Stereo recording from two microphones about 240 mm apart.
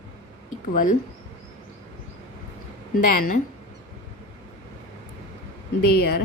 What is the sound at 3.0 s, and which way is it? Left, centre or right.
Speech, left.